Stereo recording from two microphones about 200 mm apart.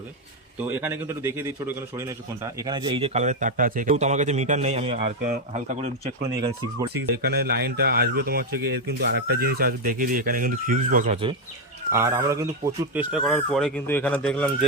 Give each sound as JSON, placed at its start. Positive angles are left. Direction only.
{"t": 0.8, "sound": "a man's voice", "side_deg": -10}
{"t": 6.9, "sound": "speech", "side_deg": -55}
{"t": 11.9, "sound": "speech", "side_deg": -15}